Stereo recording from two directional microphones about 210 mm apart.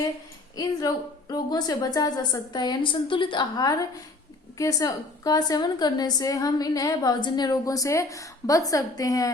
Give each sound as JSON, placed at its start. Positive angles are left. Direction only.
{"t": 0.5, "sound": "a woman's voice", "side_deg": 15}